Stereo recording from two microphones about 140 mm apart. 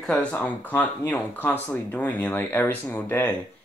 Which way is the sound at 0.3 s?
10° left (ahead or behind).